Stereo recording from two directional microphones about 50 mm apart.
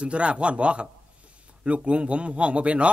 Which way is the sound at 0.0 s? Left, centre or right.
Right.